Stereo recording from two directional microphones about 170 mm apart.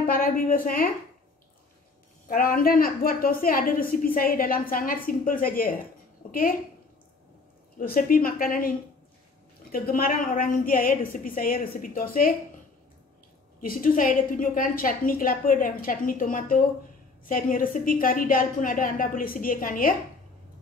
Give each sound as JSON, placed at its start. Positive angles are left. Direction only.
{"t": 0.0, "sound": "a woman's voice", "side_deg": 55}
{"t": 2.2, "sound": "a woman's voice", "side_deg": 55}
{"t": 7.8, "sound": "a woman's voice", "side_deg": 60}
{"t": 13.6, "sound": "a woman's voice", "side_deg": 55}